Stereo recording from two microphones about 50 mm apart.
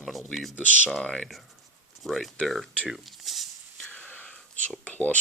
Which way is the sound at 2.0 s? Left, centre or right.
Centre.